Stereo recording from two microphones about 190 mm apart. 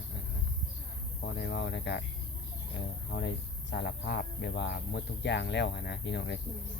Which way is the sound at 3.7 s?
65° left (ahead or behind).